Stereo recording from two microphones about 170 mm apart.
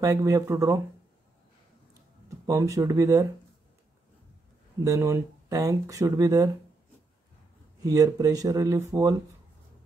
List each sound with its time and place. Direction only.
0.0 s speech: 20° right (ahead or behind)
2.2 s speech: 20° right (ahead or behind)
4.8 s speech: 20° right (ahead or behind)
7.8 s speech: 20° right (ahead or behind)